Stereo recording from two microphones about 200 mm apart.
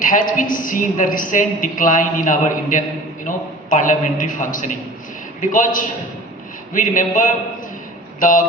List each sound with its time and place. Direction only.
0.0 s a woman's voice: 40° left (ahead or behind)